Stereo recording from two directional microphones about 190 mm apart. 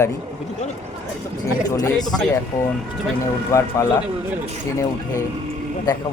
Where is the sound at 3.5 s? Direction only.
15° left (ahead or behind).